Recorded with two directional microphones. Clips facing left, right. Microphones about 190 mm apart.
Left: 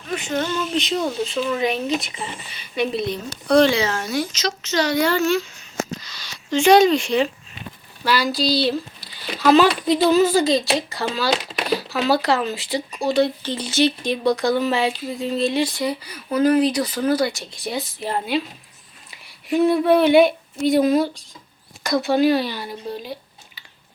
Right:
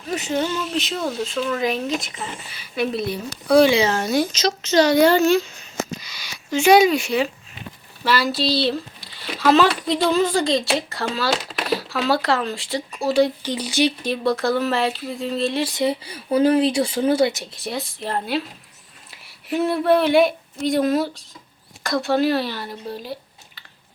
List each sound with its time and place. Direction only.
0.1 s speech: 40° right (ahead or behind)
0.3 s speech: 5° right (ahead or behind)
3.8 s speech: 30° right (ahead or behind)
6.1 s a sound: 15° right (ahead or behind)
6.5 s speech: 5° right (ahead or behind)
15.7 s speech: 25° right (ahead or behind)
17.5 s a woman's voice: centre (ahead or behind)